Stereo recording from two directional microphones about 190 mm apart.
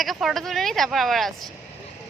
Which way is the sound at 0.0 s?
Centre (ahead or behind).